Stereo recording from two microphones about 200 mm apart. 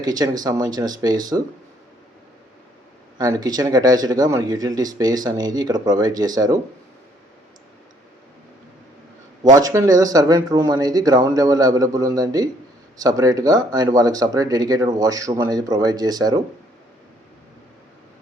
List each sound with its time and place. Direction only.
0.0 s speech: 20° right (ahead or behind)
3.2 s speech: 20° right (ahead or behind)
9.6 s speech: 15° right (ahead or behind)